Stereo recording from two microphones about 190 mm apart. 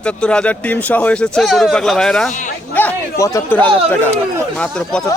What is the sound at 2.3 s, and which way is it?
Speech, 40° left (ahead or behind).